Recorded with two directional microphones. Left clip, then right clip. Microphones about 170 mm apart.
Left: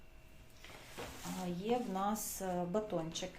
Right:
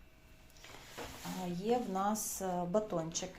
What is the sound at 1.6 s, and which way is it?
A woman's voice, 15° right (ahead or behind).